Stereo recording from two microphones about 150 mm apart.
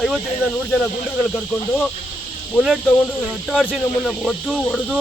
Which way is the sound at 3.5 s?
5° right (ahead or behind).